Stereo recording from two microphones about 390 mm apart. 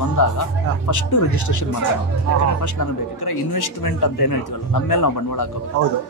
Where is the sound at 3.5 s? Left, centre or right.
Left.